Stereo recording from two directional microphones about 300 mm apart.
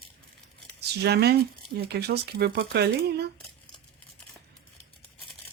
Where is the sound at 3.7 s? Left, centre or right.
Centre.